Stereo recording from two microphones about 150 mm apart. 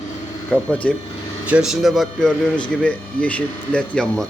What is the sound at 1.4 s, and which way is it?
Speech, 5° right (ahead or behind).